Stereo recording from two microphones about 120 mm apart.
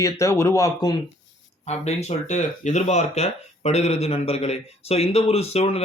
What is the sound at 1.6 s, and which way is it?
Speech, 65° left (ahead or behind).